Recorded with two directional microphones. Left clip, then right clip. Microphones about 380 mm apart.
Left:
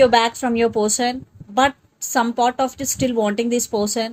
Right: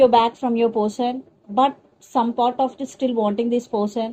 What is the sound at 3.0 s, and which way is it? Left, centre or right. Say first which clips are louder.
A woman's voice: left 1 dB; left.